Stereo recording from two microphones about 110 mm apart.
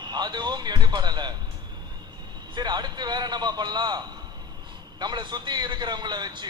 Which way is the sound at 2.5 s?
40° right (ahead or behind).